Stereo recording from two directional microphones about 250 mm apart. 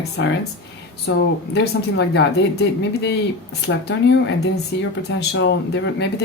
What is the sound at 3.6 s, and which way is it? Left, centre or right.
Speech, left.